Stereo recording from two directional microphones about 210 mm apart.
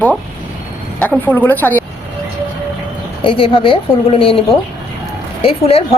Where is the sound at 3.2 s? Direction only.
25° left (ahead or behind).